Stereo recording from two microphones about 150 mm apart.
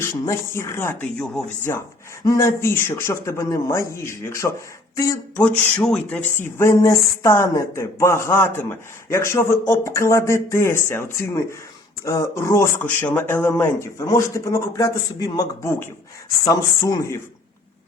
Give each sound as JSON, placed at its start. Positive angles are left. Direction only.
{"t": 0.0, "sound": "speech", "side_deg": 20}
{"t": 5.4, "sound": "speech", "side_deg": 10}